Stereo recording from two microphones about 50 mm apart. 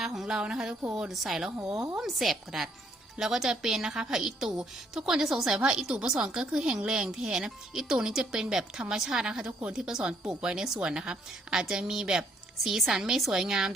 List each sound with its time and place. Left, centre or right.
0.0 s a woman's voice: centre
12.5 s a woman's voice: centre